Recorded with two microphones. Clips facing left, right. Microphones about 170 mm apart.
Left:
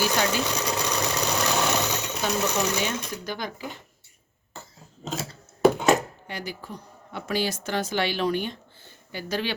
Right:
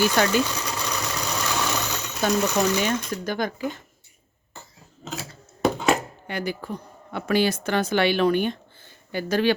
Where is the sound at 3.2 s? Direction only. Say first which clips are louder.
Right 6 dB; 50° right (ahead or behind).